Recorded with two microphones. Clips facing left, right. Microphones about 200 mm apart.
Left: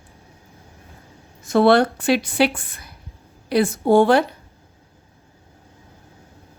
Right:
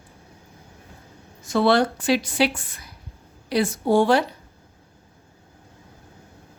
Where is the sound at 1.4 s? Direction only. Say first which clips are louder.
Left 4 dB; 55° left (ahead or behind).